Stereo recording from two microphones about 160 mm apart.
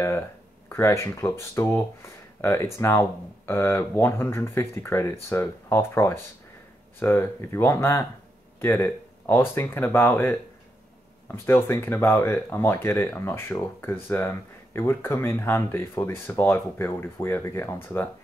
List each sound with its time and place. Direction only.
0.7 s speech: 15° left (ahead or behind)